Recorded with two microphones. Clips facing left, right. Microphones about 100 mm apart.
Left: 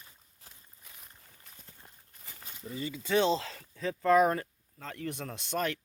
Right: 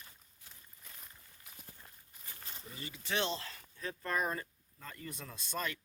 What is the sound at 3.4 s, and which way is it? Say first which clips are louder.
Speech: left 7 dB; 90° left.